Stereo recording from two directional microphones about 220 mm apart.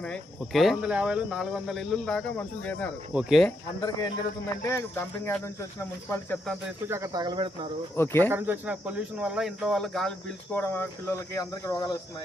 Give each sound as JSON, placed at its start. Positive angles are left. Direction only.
{"t": 0.0, "sound": "speech", "side_deg": 0}
{"t": 3.1, "sound": "speech", "side_deg": -5}
{"t": 3.8, "sound": "speech", "side_deg": 15}
{"t": 6.8, "sound": "speech", "side_deg": -15}
{"t": 7.9, "sound": "speech", "side_deg": 10}
{"t": 8.3, "sound": "speech", "side_deg": -10}